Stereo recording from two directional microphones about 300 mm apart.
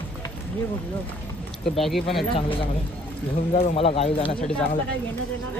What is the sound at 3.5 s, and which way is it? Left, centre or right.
Speech, centre.